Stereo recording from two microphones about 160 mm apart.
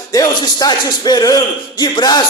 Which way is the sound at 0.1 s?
25° left (ahead or behind).